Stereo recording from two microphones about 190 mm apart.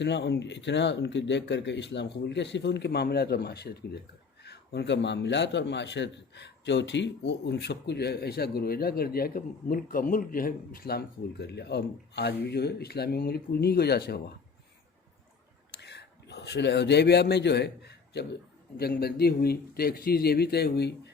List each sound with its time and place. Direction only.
0.0 s a man's voice: 65° left (ahead or behind)
15.7 s a sound: 65° left (ahead or behind)
18.8 s a man's voice: 55° left (ahead or behind)